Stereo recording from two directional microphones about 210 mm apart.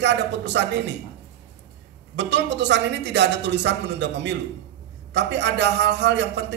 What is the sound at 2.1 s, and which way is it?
Speech, 55° right (ahead or behind).